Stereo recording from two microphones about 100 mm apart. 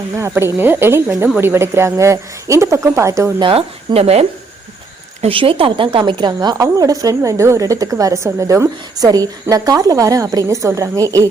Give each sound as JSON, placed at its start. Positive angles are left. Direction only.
{"t": 0.2, "sound": "speech", "side_deg": -25}
{"t": 3.4, "sound": "speech", "side_deg": -75}
{"t": 5.2, "sound": "a woman's voice", "side_deg": -65}